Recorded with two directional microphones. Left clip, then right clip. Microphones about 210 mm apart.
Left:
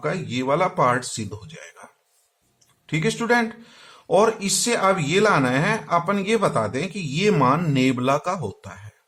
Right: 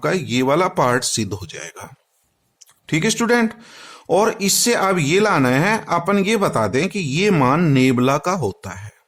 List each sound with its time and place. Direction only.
0.0 s speech: 50° right (ahead or behind)